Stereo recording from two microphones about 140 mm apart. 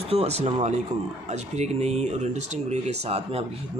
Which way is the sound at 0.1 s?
50° right (ahead or behind).